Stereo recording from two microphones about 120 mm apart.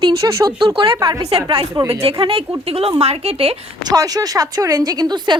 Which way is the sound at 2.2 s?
50° right (ahead or behind).